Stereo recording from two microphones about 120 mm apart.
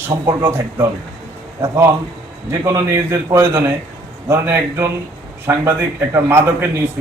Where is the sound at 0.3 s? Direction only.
30° right (ahead or behind).